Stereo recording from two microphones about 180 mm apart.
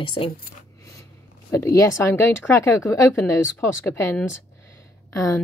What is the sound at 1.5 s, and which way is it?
Speech, 15° left (ahead or behind).